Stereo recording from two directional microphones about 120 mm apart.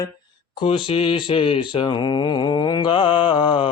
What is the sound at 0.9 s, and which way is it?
Mantra, 50° left (ahead or behind).